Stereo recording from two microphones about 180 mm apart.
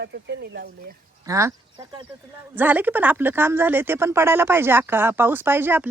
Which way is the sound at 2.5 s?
10° right (ahead or behind).